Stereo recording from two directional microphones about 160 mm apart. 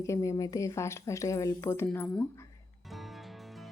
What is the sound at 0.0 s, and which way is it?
A woman's voice, 20° left (ahead or behind).